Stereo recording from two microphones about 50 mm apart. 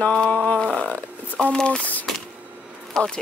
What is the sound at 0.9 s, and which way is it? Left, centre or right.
Speech, left.